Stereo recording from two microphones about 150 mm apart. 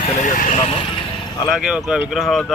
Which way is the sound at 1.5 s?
5° right (ahead or behind).